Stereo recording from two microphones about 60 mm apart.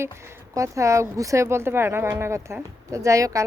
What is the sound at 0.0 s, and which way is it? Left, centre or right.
Speech, right.